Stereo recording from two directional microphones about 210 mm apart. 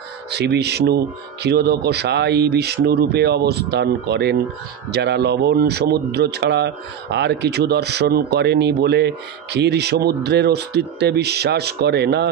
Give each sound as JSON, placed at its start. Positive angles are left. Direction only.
{"t": 0.3, "sound": "speech", "side_deg": -50}